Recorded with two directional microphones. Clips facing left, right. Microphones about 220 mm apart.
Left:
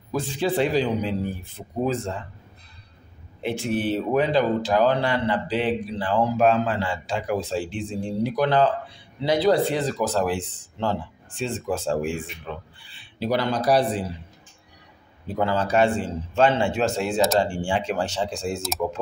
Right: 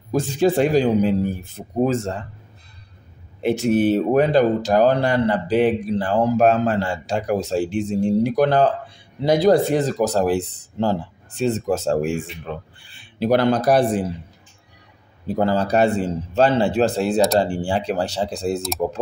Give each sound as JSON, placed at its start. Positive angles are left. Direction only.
{"t": 0.1, "sound": "speech", "side_deg": -45}
{"t": 3.4, "sound": "speech", "side_deg": -45}
{"t": 15.2, "sound": "a man's voice", "side_deg": -40}